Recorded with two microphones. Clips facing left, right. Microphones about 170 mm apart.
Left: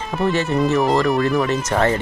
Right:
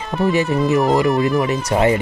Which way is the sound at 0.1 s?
Centre (ahead or behind).